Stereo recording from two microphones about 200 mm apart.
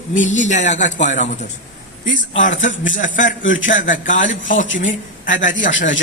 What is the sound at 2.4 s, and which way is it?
A man's voice, 40° left (ahead or behind).